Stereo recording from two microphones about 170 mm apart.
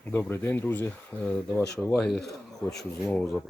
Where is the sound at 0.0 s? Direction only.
10° left (ahead or behind).